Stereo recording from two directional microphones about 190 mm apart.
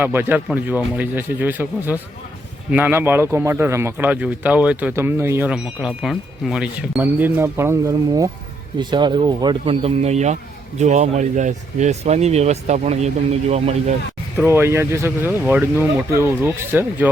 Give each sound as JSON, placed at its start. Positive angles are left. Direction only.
{"t": 0.0, "sound": "speech", "side_deg": -10}
{"t": 14.3, "sound": "speech", "side_deg": -10}